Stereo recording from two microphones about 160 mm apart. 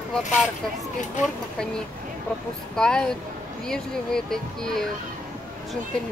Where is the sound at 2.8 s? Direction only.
5° left (ahead or behind).